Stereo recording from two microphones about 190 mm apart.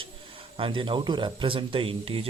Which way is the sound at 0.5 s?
25° right (ahead or behind).